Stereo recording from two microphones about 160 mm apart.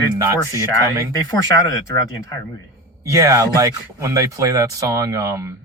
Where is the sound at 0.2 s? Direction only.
20° right (ahead or behind).